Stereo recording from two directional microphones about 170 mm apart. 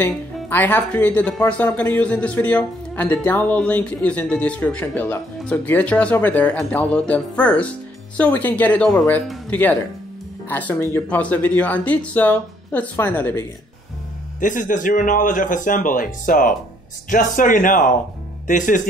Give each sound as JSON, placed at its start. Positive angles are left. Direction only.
{"t": 0.5, "sound": "speech", "side_deg": 10}
{"t": 14.4, "sound": "speech", "side_deg": 50}